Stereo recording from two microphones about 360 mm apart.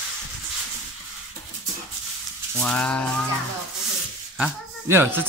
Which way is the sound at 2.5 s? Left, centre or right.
Centre.